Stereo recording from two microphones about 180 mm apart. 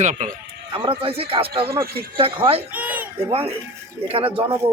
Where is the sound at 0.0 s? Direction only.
40° right (ahead or behind).